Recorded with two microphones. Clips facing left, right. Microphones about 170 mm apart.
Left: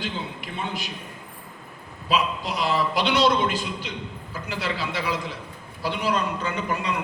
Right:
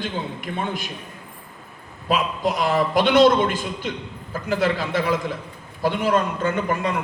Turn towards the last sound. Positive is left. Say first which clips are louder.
# right 5 dB
turn(degrees=-50)  # may be behind; listen again after turning